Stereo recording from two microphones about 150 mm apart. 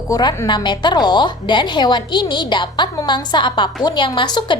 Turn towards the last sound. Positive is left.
turn(degrees=30)  # may be behind; listen again after turning